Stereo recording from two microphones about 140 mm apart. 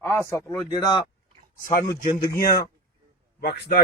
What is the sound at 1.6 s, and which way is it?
Speech, 70° left (ahead or behind).